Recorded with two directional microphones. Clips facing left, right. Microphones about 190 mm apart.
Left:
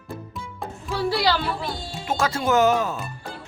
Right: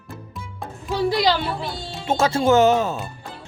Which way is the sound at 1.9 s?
25° right (ahead or behind).